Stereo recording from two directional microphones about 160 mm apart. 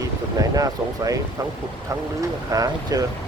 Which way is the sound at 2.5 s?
20° right (ahead or behind).